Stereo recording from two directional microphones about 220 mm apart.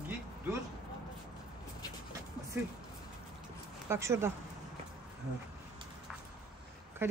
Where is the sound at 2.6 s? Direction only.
10° right (ahead or behind).